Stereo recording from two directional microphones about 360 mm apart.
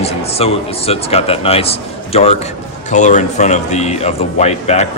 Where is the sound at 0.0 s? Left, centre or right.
Centre.